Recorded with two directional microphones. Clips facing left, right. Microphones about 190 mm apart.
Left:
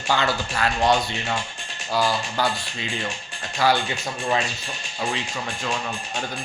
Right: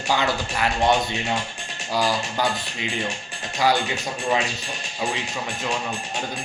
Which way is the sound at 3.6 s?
15° right (ahead or behind).